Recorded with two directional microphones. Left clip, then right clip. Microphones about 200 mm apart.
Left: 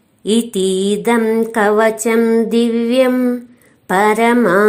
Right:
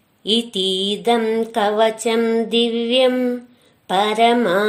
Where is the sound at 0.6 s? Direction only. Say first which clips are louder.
Left 3 dB; 30° left (ahead or behind).